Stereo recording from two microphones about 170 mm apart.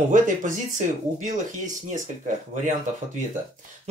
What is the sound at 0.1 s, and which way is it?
Speech, 50° right (ahead or behind).